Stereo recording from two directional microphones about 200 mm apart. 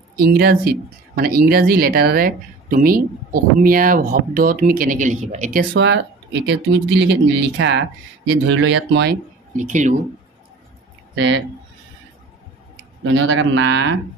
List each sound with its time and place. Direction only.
0.2 s speech: 50° right (ahead or behind)
5.8 s speech: 60° right (ahead or behind)
9.6 s speech: 40° right (ahead or behind)
11.1 s a man's voice: 65° right (ahead or behind)
13.0 s a man's voice: 80° right